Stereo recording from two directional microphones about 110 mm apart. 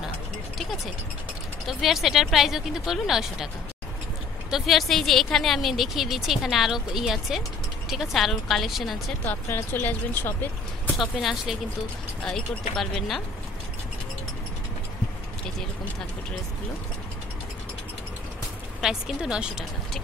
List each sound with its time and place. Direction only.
1.7 s speech: centre (ahead or behind)
4.5 s speech: centre (ahead or behind)
9.2 s speech: 20° left (ahead or behind)
11.0 s speech: centre (ahead or behind)
18.8 s speech: 5° right (ahead or behind)